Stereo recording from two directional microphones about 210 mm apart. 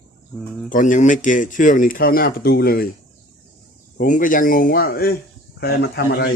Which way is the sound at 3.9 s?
40° left (ahead or behind).